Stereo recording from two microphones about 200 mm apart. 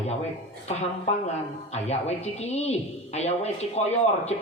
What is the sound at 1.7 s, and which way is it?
Speech, 35° left (ahead or behind).